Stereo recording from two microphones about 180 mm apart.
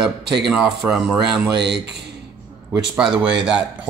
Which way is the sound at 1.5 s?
70° right (ahead or behind).